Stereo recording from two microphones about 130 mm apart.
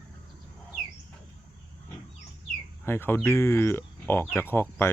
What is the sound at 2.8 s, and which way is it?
Speech, 15° left (ahead or behind).